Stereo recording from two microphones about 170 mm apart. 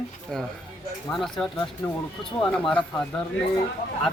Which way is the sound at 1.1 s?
Centre (ahead or behind).